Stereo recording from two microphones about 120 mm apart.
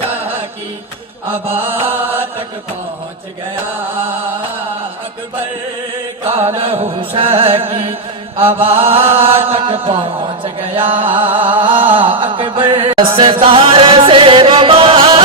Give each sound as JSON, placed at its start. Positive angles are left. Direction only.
{"t": 6.2, "sound": "chant", "side_deg": -50}
{"t": 12.2, "sound": "music", "side_deg": -45}